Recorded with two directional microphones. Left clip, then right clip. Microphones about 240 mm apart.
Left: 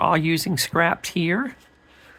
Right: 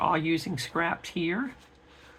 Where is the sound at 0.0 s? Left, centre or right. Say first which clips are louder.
Left 6 dB; left.